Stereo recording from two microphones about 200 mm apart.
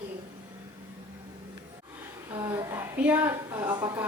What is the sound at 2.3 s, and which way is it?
A woman's voice, 15° right (ahead or behind).